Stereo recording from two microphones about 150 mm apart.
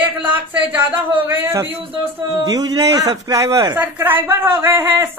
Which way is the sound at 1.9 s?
35° right (ahead or behind).